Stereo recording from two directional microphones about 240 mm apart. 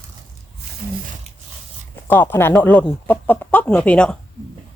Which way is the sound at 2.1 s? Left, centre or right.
Centre.